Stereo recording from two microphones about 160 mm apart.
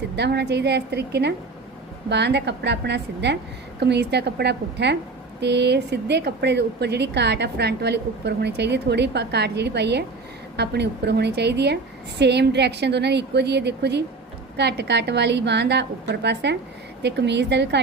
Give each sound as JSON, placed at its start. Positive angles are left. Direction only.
{"t": 0.2, "sound": "speech", "side_deg": -90}